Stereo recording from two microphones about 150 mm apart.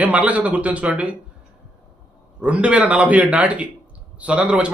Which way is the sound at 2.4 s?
10° right (ahead or behind).